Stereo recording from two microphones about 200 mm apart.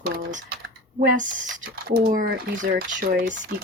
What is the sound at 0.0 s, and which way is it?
Typing, 55° right (ahead or behind).